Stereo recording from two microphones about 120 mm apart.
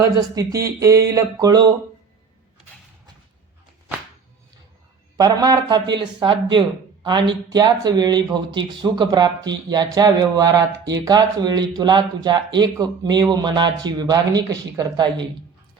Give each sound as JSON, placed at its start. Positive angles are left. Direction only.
{"t": 0.3, "sound": "speech", "side_deg": -25}
{"t": 5.1, "sound": "a man's voice", "side_deg": -35}